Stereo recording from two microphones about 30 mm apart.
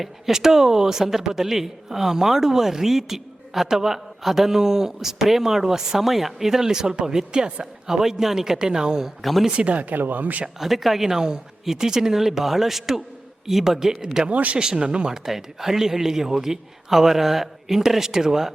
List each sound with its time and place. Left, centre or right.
0.0 s a man's voice: centre
8.5 s speech: right
9.5 s speech: right
9.9 s speech: right
10.6 s a man's voice: centre
14.3 s speech: right
14.8 s speech: right
15.4 s a man's voice: centre